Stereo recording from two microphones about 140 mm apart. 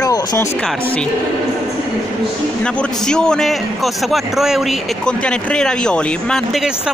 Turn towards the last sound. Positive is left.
turn(degrees=0)  # may be behind; listen again after turning